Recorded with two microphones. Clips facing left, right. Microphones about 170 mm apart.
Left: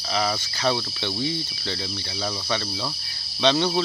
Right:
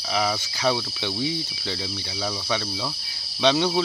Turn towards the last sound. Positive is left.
turn(degrees=-10)  # may be behind; listen again after turning